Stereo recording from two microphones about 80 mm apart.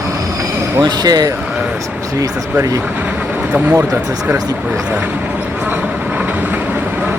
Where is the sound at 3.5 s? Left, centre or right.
Centre.